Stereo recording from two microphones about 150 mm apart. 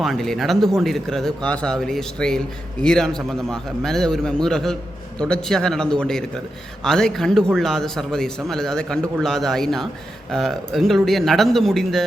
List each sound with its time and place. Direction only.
0.0 s speech: centre (ahead or behind)